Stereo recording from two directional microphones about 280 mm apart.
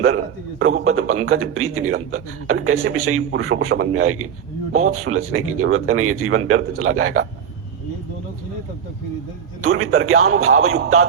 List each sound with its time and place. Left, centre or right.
0.6 s a man's voice: right
9.6 s a man's voice: right